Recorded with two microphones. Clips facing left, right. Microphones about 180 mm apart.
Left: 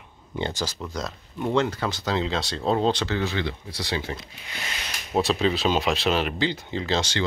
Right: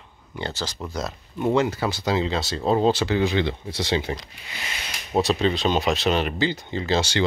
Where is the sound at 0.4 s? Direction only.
15° left (ahead or behind).